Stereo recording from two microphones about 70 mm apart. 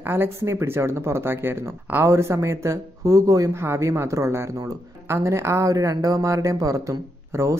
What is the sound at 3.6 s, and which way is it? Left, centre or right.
A woman's voice, right.